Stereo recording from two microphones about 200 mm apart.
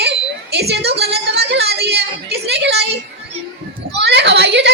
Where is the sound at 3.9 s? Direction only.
60° right (ahead or behind).